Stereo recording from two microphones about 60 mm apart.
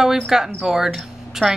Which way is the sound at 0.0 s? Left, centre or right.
Centre.